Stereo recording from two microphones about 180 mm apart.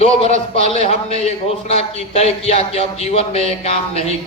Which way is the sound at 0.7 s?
35° left (ahead or behind).